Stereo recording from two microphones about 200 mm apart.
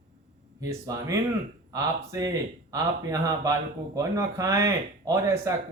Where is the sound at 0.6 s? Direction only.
15° right (ahead or behind).